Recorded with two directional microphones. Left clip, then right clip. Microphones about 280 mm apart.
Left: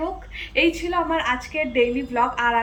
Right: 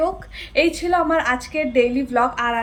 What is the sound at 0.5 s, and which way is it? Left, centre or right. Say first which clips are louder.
A woman's voice: right 3 dB; centre.